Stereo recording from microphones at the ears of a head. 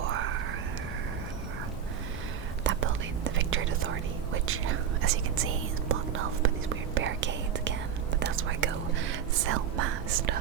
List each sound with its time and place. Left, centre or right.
0.0 s a sound: right
2.6 s whispering: right
4.4 s speech: right